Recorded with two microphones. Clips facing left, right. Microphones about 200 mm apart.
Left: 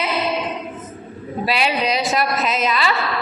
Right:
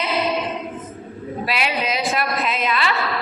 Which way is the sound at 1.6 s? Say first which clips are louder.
Left 3 dB; 35° left (ahead or behind).